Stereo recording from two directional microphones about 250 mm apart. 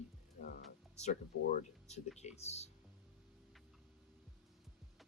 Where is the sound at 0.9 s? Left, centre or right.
Left.